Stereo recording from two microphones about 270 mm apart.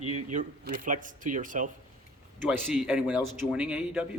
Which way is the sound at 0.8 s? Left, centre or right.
Right.